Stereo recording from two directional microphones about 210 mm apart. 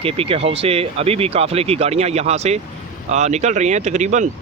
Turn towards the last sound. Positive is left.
turn(degrees=-35)  # may be behind; listen again after turning